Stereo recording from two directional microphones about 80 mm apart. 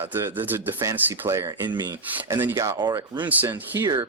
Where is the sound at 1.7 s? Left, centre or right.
Right.